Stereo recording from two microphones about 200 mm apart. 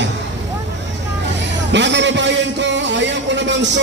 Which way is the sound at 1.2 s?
60° right (ahead or behind).